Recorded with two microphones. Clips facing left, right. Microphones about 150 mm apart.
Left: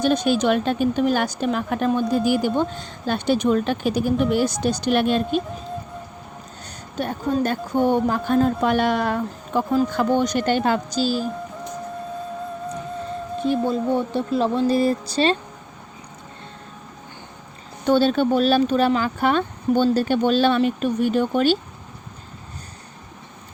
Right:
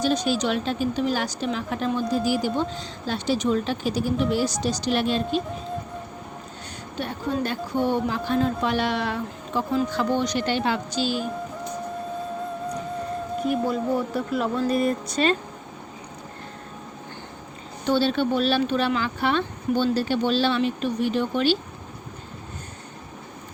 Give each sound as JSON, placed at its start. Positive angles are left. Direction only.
{"t": 0.0, "sound": "a woman's voice", "side_deg": 55}
{"t": 7.0, "sound": "speech", "side_deg": 50}
{"t": 13.4, "sound": "speech", "side_deg": 25}
{"t": 17.8, "sound": "speech", "side_deg": 45}